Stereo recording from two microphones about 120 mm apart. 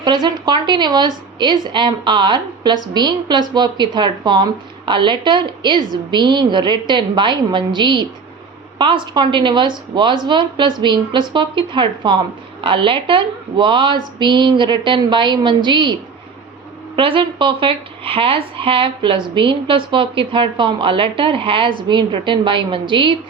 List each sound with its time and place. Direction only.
0.0 s a woman's voice: 40° right (ahead or behind)